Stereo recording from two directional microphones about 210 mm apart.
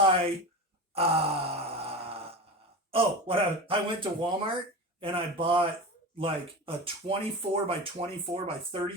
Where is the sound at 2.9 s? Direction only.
25° right (ahead or behind).